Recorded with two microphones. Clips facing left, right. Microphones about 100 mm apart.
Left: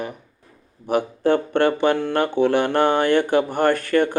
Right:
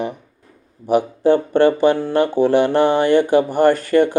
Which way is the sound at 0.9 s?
55° left (ahead or behind).